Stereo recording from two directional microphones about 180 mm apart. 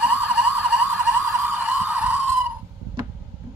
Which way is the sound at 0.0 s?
5° right (ahead or behind).